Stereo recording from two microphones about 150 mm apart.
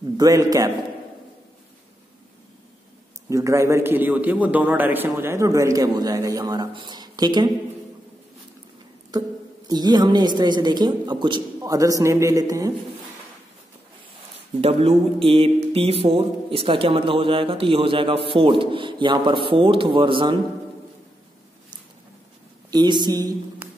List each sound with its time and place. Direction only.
0.2 s a man's voice: 25° right (ahead or behind)
3.3 s a man's voice: 20° right (ahead or behind)
9.7 s a man's voice: 25° right (ahead or behind)
14.6 s speech: 40° right (ahead or behind)
22.7 s a man's voice: 30° right (ahead or behind)